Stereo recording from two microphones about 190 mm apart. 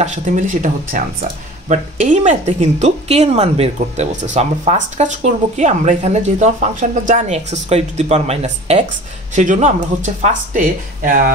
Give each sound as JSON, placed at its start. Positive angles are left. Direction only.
{"t": 0.0, "sound": "a woman's voice", "side_deg": -40}